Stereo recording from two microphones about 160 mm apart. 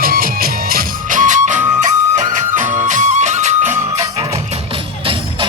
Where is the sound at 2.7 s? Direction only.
50° right (ahead or behind).